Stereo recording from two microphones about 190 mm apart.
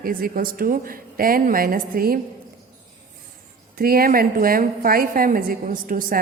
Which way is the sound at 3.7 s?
50° right (ahead or behind).